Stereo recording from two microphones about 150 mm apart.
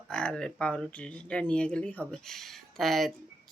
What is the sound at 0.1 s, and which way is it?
Speech, 5° left (ahead or behind).